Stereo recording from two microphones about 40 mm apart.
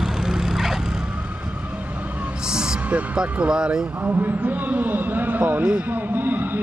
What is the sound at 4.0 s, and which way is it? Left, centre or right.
A man's voice, right.